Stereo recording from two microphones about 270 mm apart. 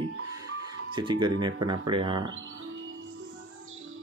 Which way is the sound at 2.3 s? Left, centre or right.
Right.